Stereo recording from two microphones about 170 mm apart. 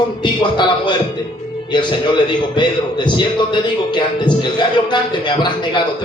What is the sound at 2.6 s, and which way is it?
Speech, 25° left (ahead or behind).